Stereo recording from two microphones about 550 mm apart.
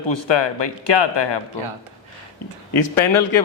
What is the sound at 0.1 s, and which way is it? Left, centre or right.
Speech, left.